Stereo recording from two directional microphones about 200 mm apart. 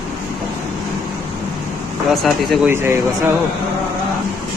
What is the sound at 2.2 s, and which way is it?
Speech, centre (ahead or behind).